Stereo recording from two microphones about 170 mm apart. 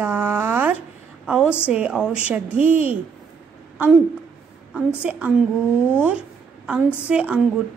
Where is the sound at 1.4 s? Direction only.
15° left (ahead or behind).